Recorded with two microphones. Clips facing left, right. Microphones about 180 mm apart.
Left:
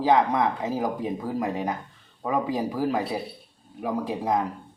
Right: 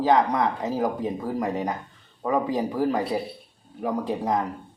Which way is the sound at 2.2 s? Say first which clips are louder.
Right 2 dB; 10° left (ahead or behind).